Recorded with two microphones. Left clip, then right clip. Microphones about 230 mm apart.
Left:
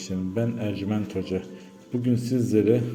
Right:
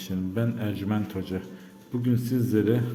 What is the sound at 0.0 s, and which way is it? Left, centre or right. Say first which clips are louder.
A man's voice: left 2 dB; centre.